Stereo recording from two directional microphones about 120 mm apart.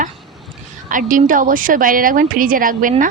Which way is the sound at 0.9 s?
90° right.